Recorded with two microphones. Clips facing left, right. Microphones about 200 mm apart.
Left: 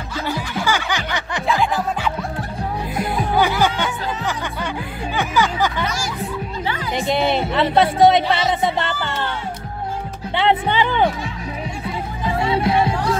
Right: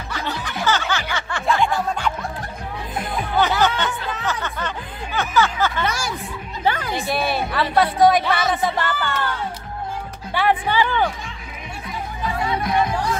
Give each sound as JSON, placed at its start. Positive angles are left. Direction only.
{"t": 0.3, "sound": "music", "side_deg": 10}
{"t": 1.5, "sound": "music", "side_deg": 5}
{"t": 3.3, "sound": "music", "side_deg": 10}
{"t": 5.9, "sound": "music", "side_deg": -60}
{"t": 6.6, "sound": "music", "side_deg": -45}
{"t": 7.0, "sound": "music", "side_deg": 20}
{"t": 10.3, "sound": "music", "side_deg": 25}
{"t": 12.4, "sound": "music", "side_deg": 30}